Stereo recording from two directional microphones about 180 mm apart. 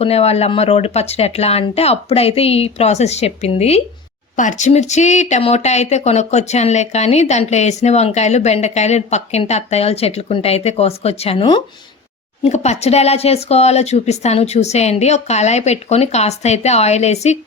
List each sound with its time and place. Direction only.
0.0 s speech: 35° left (ahead or behind)
12.4 s speech: 40° left (ahead or behind)